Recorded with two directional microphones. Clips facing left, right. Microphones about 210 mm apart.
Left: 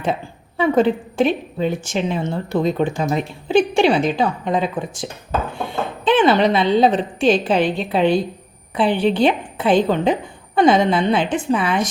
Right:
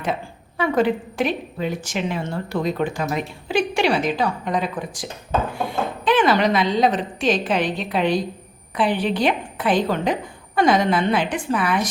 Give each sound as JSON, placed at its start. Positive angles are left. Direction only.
{"t": 0.0, "sound": "a woman's voice", "side_deg": 25}